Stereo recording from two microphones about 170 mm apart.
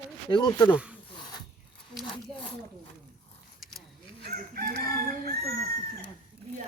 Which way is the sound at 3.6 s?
Centre (ahead or behind).